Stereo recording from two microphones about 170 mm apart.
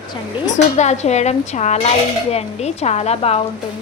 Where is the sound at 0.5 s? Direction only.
40° left (ahead or behind).